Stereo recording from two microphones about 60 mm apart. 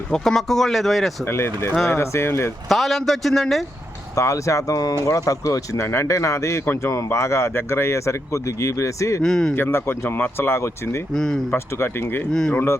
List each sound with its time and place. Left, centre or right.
0.1 s speech: centre
1.2 s speech: left
2.6 s speech: centre
4.1 s speech: left
5.0 s speech: left
5.8 s speech: left
6.1 s speech: left
9.2 s speech: centre
9.6 s speech: left
11.1 s speech: centre
11.5 s speech: left
12.3 s speech: centre